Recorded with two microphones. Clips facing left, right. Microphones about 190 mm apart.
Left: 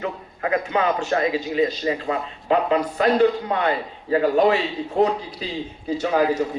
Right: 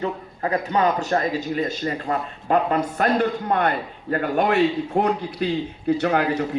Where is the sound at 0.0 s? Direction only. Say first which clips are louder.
Right 1 dB; 35° right (ahead or behind).